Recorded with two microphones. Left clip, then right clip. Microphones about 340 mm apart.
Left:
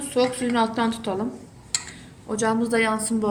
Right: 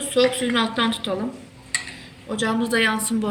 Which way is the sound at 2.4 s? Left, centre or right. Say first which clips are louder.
Right 1 dB; left.